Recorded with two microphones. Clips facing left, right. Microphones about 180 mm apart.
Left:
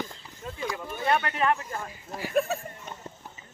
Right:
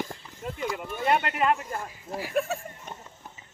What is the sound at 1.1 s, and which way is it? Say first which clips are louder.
Speech: right 1 dB; 15° right (ahead or behind).